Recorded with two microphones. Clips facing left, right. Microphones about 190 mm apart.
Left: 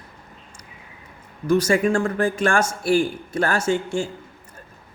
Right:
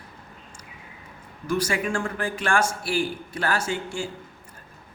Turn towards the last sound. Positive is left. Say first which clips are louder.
# left 6 dB
turn(degrees=45)  # may be behind; listen again after turning